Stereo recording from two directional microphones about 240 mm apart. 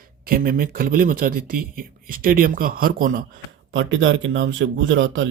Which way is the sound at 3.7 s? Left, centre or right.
Right.